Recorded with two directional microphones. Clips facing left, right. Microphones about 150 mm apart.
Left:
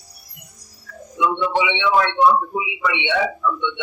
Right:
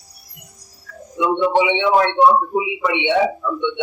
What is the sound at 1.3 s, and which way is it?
A man's voice, 45° right (ahead or behind).